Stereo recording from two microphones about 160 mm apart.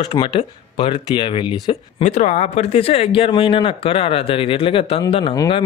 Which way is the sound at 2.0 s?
50° left (ahead or behind).